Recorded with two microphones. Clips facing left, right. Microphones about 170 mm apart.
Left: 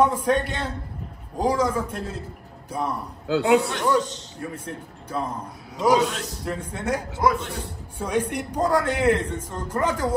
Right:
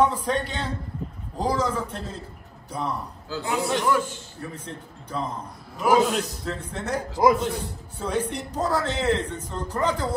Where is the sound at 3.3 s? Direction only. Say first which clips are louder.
Left 10 dB; 65° left (ahead or behind).